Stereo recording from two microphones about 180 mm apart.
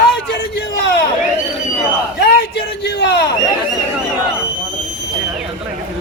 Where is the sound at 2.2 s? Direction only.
70° left (ahead or behind).